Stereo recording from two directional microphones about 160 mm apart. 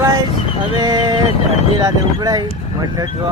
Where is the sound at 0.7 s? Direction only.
30° right (ahead or behind).